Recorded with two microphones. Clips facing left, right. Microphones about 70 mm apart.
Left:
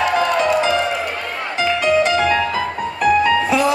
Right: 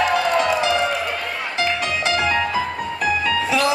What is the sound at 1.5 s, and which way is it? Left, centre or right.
Music, left.